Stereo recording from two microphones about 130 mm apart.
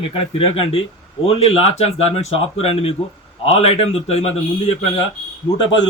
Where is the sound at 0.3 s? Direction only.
50° left (ahead or behind).